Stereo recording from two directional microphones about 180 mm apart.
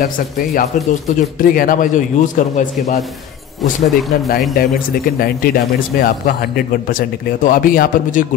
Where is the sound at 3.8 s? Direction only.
Centre (ahead or behind).